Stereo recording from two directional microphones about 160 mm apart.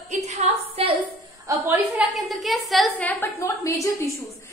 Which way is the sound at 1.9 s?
Centre (ahead or behind).